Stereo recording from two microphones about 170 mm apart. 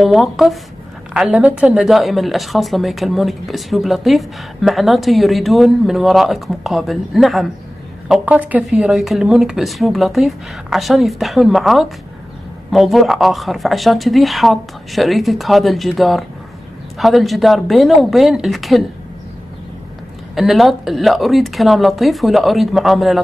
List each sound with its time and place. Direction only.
0.0 s a woman's voice: centre (ahead or behind)
20.3 s a woman's voice: centre (ahead or behind)